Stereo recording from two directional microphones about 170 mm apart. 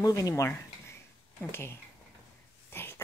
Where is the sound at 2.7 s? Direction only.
15° left (ahead or behind).